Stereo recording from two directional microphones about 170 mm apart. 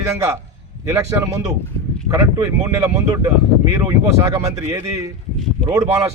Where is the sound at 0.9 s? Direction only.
15° right (ahead or behind).